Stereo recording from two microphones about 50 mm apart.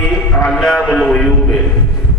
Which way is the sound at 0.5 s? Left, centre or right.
Centre.